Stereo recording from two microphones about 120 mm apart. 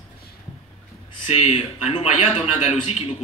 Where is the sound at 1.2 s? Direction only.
65° left (ahead or behind).